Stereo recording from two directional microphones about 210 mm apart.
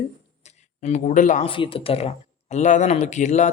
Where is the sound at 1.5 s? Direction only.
25° left (ahead or behind).